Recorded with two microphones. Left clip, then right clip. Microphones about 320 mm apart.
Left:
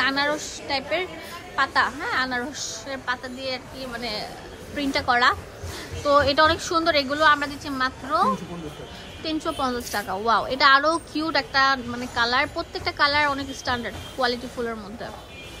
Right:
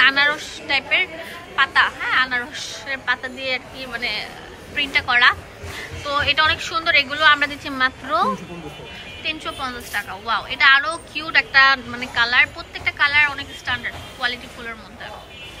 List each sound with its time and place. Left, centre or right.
0.0 s a woman's voice: centre